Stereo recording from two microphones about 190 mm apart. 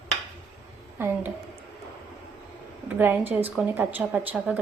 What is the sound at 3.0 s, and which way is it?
A woman's voice, 10° right (ahead or behind).